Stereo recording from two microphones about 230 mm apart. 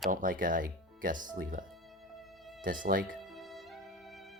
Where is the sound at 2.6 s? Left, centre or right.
Right.